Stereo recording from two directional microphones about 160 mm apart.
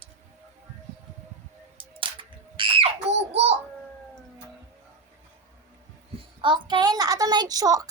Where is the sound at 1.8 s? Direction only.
35° right (ahead or behind).